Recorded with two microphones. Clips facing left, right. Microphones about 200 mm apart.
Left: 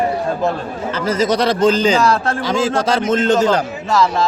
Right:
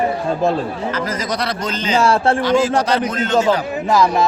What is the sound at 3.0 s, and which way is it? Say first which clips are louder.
Speech: left 6 dB; 25° left (ahead or behind).